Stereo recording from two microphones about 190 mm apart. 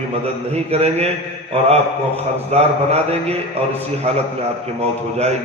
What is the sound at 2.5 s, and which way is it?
Speech, 35° right (ahead or behind).